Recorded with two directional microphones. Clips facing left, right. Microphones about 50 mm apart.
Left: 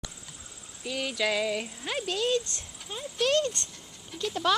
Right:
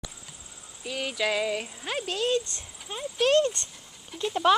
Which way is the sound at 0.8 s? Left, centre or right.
Centre.